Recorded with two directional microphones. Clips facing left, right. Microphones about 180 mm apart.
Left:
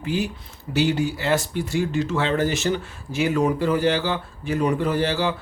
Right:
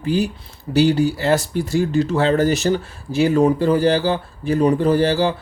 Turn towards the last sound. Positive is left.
turn(degrees=-35)  # may be behind; listen again after turning